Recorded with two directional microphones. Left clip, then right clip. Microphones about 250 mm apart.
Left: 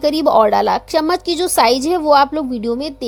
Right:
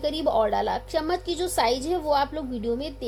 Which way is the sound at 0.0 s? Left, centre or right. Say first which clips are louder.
Left 11 dB; left.